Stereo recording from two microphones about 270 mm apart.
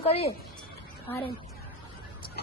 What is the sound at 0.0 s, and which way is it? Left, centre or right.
Speech, left.